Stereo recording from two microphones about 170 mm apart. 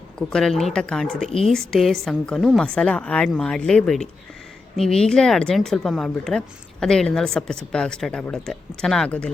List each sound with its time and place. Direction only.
0.2 s speech: 5° left (ahead or behind)
1.3 s speech: 35° left (ahead or behind)
1.5 s speech: centre (ahead or behind)